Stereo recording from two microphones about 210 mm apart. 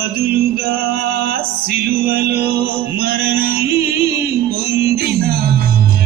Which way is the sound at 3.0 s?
45° right (ahead or behind).